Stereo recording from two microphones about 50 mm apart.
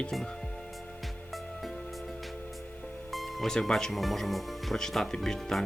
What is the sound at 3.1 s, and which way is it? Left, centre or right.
Speech, centre.